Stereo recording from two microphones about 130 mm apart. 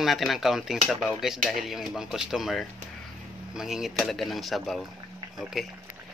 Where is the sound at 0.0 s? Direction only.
Centre (ahead or behind).